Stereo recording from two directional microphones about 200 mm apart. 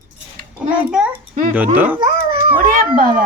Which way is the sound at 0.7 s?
5° right (ahead or behind).